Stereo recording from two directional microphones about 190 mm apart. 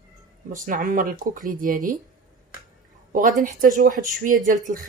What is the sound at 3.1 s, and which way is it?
Speech, 45° right (ahead or behind).